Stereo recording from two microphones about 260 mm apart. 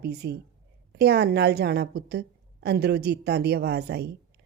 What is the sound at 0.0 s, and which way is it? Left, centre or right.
Speech, right.